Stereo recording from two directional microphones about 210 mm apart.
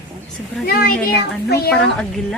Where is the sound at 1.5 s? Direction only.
50° left (ahead or behind).